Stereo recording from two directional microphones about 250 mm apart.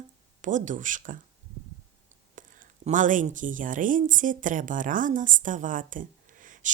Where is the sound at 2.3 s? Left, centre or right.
Right.